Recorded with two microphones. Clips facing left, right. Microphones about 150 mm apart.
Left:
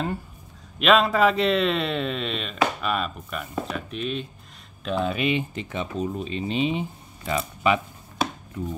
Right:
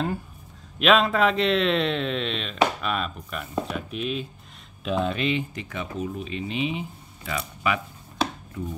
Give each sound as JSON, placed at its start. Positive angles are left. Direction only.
{"t": 0.7, "sound": "a man's voice", "side_deg": 0}
{"t": 5.2, "sound": "speech", "side_deg": 20}